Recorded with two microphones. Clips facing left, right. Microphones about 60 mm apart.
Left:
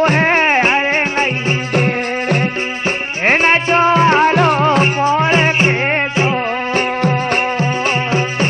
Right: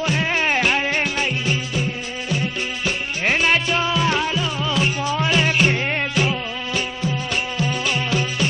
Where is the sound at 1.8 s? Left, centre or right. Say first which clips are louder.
Left 9 dB; left.